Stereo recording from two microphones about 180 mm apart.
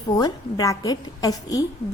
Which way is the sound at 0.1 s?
20° left (ahead or behind).